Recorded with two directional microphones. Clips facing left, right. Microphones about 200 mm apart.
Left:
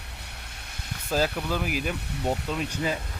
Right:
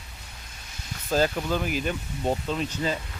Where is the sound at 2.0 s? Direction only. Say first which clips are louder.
Left 1 dB; 70° left (ahead or behind).